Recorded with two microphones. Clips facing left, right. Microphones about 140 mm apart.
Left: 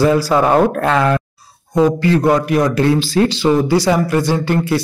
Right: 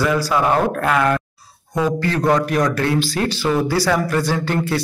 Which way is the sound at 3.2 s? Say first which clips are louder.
Left 6 dB; 20° left (ahead or behind).